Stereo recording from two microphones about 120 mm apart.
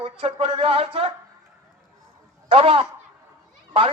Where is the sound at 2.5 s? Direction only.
50° right (ahead or behind).